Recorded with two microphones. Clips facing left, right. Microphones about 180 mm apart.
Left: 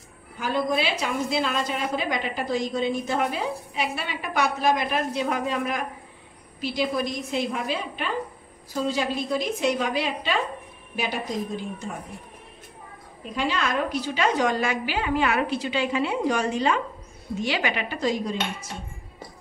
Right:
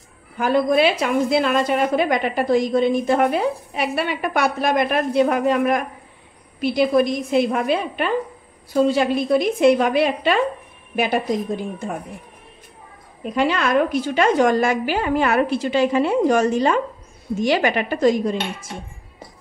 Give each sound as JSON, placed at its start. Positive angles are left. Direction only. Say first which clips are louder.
{"t": 0.4, "sound": "a woman's voice", "louder": "right 8 dB", "side_deg": -55}
{"t": 13.2, "sound": "a woman's voice", "louder": "right 7 dB", "side_deg": -60}